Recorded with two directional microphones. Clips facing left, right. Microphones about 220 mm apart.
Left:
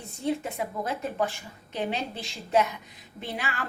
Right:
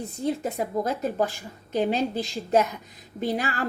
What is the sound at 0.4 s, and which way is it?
A woman's voice, 40° right (ahead or behind).